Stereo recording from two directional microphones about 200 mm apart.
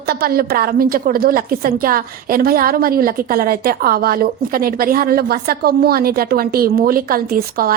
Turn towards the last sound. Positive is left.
turn(degrees=-50)  # may be behind; listen again after turning